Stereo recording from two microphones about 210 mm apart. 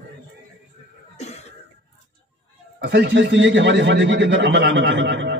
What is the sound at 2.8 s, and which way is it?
Speech, 60° right (ahead or behind).